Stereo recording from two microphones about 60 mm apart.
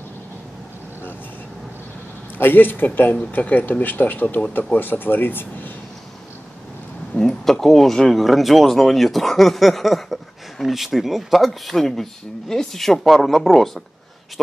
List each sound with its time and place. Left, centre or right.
2.3 s speech: left
7.2 s speech: centre